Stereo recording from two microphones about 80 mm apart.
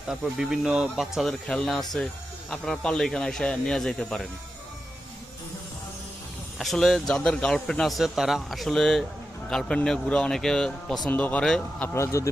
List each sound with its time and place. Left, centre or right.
0.1 s a man's voice: centre
6.6 s a man's voice: centre
11.1 s speech: centre
11.9 s speech: left